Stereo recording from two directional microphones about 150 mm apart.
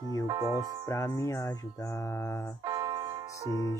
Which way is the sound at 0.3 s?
20° right (ahead or behind).